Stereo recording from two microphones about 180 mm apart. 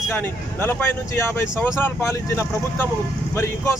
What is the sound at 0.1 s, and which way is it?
Speech, 15° left (ahead or behind).